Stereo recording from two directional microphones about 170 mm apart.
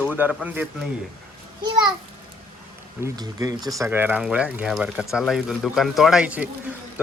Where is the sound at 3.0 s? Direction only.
20° right (ahead or behind).